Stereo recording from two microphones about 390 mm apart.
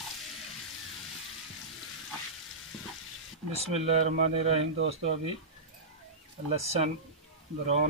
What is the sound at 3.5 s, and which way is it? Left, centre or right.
Speech, centre.